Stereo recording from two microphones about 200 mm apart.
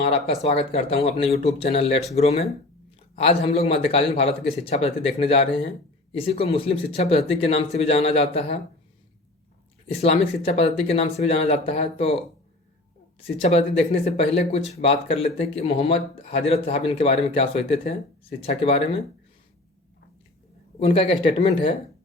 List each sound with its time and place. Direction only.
0.4 s speech: 30° left (ahead or behind)
10.0 s speech: 30° left (ahead or behind)
13.1 s speech: 30° left (ahead or behind)
20.7 s speech: 30° left (ahead or behind)